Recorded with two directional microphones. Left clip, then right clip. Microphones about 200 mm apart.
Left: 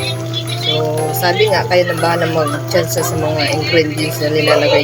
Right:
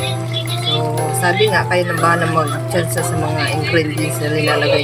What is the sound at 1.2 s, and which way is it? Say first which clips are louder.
Speech: left 1 dB; centre (ahead or behind).